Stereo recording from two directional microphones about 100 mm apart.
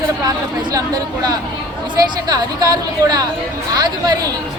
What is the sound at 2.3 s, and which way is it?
A woman's voice, 40° right (ahead or behind).